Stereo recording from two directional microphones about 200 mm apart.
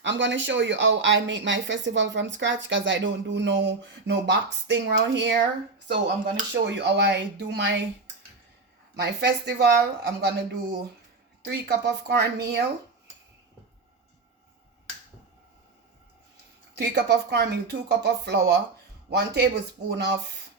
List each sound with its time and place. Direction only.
0.0 s speech: 65° right (ahead or behind)
9.0 s speech: 55° right (ahead or behind)
16.7 s speech: 55° right (ahead or behind)